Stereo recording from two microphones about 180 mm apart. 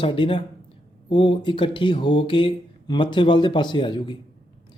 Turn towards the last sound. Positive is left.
turn(degrees=25)  # may be behind; listen again after turning